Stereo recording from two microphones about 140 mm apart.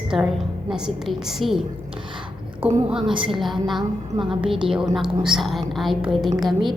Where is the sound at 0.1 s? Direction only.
Centre (ahead or behind).